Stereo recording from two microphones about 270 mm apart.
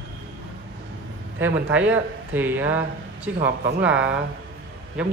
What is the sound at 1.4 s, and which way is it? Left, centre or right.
Speech, centre.